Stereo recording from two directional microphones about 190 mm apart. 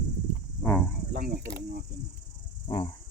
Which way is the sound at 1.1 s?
50° right (ahead or behind).